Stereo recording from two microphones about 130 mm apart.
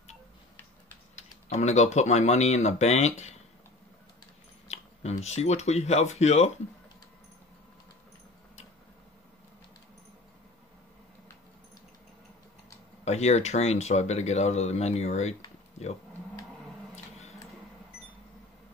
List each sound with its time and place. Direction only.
1.1 s speech: 60° left (ahead or behind)
4.6 s speech: 55° left (ahead or behind)
13.0 s speech: 60° left (ahead or behind)
16.9 s a sound: 55° left (ahead or behind)